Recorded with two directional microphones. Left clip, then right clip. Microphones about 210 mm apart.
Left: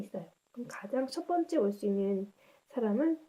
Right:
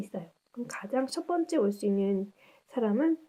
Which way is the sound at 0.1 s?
35° right (ahead or behind).